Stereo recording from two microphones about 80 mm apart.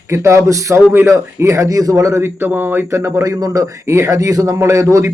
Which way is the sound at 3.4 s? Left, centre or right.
Right.